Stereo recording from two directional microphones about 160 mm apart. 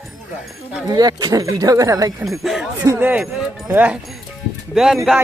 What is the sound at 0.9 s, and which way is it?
Speech, 25° right (ahead or behind).